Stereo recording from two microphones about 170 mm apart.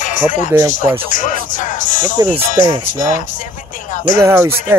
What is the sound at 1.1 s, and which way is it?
Music, 50° left (ahead or behind).